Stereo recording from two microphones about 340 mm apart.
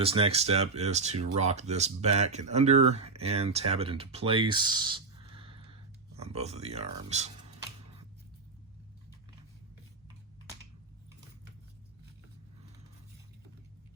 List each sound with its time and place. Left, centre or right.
0.0 s speech: centre